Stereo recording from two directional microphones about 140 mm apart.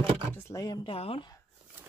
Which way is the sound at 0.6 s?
30° left (ahead or behind).